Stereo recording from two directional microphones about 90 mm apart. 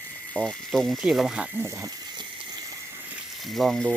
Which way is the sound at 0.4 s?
15° left (ahead or behind).